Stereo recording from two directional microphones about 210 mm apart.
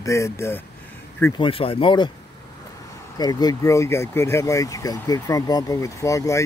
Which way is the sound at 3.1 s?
20° left (ahead or behind).